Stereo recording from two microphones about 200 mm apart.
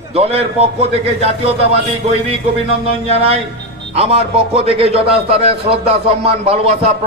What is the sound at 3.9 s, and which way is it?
A man's voice, 30° right (ahead or behind).